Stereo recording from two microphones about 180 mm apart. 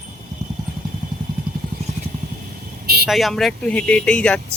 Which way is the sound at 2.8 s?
60° right (ahead or behind).